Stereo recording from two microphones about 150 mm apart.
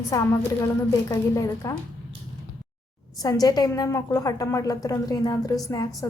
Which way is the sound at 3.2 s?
25° left (ahead or behind).